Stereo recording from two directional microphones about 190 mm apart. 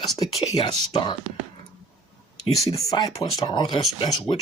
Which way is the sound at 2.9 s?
20° left (ahead or behind).